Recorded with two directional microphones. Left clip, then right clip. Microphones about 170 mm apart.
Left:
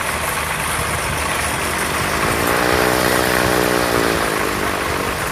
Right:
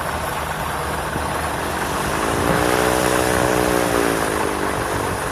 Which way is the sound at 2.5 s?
25° right (ahead or behind).